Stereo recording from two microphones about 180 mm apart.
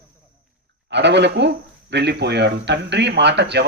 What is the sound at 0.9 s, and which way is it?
Speech, 75° right (ahead or behind).